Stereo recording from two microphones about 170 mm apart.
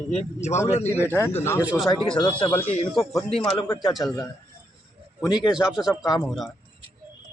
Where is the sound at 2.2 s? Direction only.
25° left (ahead or behind).